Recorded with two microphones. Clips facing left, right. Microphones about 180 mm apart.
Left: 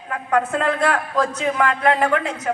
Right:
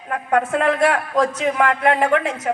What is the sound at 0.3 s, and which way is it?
A woman's voice, 25° right (ahead or behind).